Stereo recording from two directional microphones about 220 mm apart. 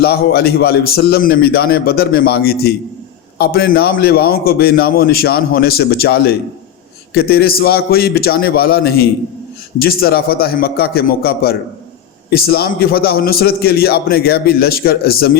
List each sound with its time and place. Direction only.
0.0 s a man's voice: 45° left (ahead or behind)